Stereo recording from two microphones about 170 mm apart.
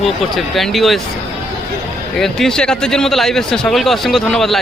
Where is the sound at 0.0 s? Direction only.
Centre (ahead or behind).